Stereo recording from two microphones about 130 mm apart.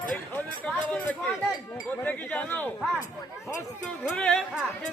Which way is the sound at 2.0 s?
10° left (ahead or behind).